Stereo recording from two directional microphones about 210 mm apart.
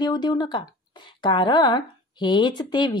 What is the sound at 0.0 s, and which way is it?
Speech, 20° left (ahead or behind).